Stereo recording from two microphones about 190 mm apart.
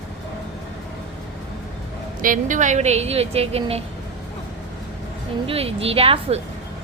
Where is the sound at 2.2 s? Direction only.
45° right (ahead or behind).